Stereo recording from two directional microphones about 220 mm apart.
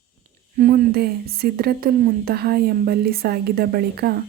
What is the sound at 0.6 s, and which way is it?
Speech, 40° right (ahead or behind).